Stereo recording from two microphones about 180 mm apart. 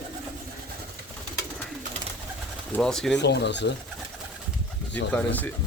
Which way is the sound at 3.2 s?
70° left (ahead or behind).